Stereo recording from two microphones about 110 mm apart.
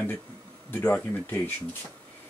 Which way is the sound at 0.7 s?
15° left (ahead or behind).